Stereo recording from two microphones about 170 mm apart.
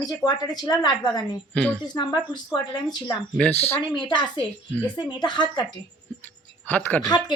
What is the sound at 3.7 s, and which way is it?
A woman's voice, 30° left (ahead or behind).